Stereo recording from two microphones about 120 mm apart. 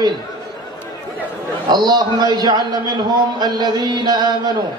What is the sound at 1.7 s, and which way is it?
A man's voice, 35° right (ahead or behind).